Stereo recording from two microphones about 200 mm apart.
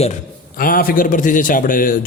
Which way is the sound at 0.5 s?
45° left (ahead or behind).